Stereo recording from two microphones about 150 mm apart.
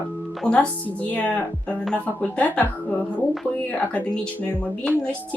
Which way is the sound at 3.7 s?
10° left (ahead or behind).